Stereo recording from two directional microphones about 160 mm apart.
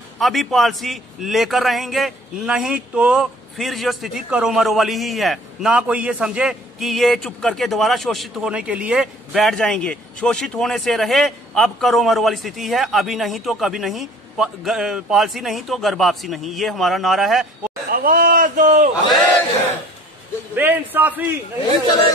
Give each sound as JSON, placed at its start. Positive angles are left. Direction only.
{"t": 0.2, "sound": "a man's voice", "side_deg": 0}
{"t": 17.8, "sound": "speech", "side_deg": -60}
{"t": 20.5, "sound": "a man's voice", "side_deg": -10}